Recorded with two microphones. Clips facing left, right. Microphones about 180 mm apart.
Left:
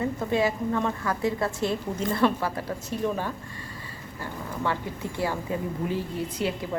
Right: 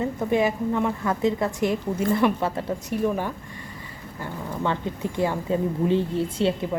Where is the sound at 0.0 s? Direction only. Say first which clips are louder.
Right 3 dB; 20° right (ahead or behind).